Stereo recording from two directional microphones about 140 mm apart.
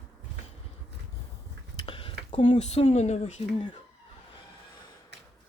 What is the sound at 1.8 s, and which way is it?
Speech, 40° left (ahead or behind).